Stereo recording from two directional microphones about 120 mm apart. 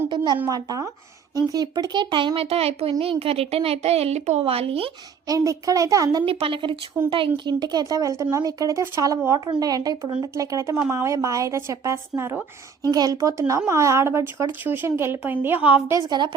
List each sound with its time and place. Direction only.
0.5 s speech: 30° right (ahead or behind); by 4.9 s 55° right (ahead or behind)
5.3 s speech: 25° right (ahead or behind)
6.2 s speech: 50° right (ahead or behind); by 12.5 s 20° right (ahead or behind)
12.9 s speech: 30° right (ahead or behind); by 15.8 s 15° right (ahead or behind)
15.9 s speech: 30° right (ahead or behind)